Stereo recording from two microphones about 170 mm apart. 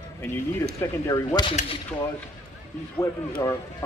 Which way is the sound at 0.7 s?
20° left (ahead or behind).